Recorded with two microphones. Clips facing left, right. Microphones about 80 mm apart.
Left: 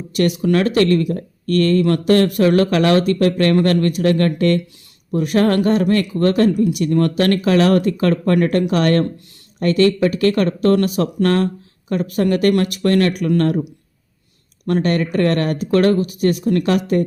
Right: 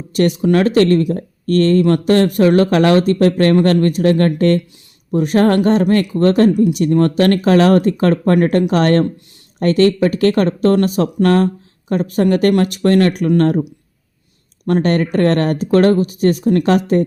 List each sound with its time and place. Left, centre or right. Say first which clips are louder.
0.2 s speech: right 3 dB; right
14.7 s speech: right 3 dB; right